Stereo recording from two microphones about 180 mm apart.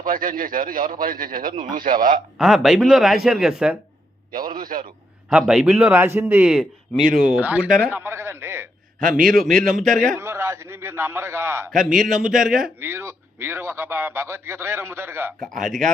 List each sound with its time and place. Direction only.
0.0 s a man's voice: 50° right (ahead or behind)
2.4 s speech: centre (ahead or behind)
4.5 s a man's voice: 50° right (ahead or behind)
5.3 s speech: 5° right (ahead or behind)
9.1 s speech: centre (ahead or behind)
10.2 s speech: 15° right (ahead or behind)
11.9 s speech: centre (ahead or behind)
15.5 s speech: centre (ahead or behind)